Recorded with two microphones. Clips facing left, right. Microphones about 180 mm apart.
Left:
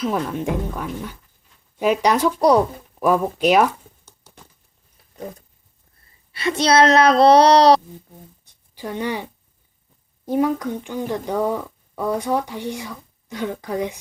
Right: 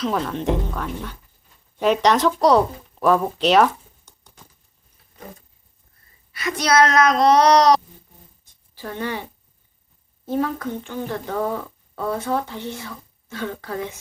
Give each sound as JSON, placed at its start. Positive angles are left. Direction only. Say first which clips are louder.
{"t": 0.0, "sound": "speech", "louder": "even", "side_deg": 10}
{"t": 6.3, "sound": "speech", "louder": "left 2 dB", "side_deg": 30}
{"t": 8.7, "sound": "speech", "louder": "left 3 dB", "side_deg": 15}
{"t": 10.2, "sound": "speech", "louder": "left 4 dB", "side_deg": 15}